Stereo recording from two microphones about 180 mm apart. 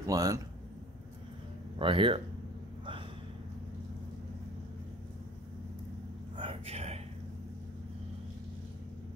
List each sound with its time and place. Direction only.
0.0 s speech: 20° right (ahead or behind)
1.8 s speech: 30° right (ahead or behind)
6.3 s a sound: 30° right (ahead or behind)